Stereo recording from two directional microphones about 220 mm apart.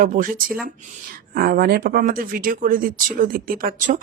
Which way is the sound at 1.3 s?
40° right (ahead or behind).